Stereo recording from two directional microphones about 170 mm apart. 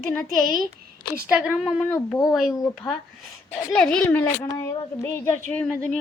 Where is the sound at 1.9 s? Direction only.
20° left (ahead or behind).